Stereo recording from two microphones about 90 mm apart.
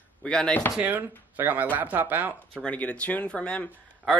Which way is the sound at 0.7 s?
20° right (ahead or behind).